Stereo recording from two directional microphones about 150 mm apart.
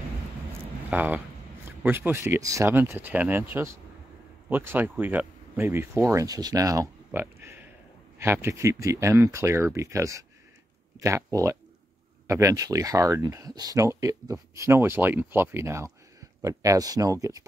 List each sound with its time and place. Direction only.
0.8 s speech: 10° right (ahead or behind)
7.1 s a sound: 15° right (ahead or behind)
8.2 s speech: 15° right (ahead or behind)